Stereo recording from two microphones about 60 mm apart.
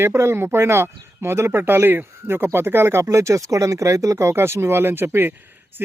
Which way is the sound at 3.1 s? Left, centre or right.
Right.